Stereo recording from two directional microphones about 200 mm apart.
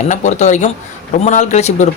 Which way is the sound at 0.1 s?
35° left (ahead or behind).